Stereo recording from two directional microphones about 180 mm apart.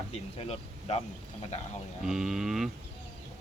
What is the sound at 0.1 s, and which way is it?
Speech, 35° left (ahead or behind).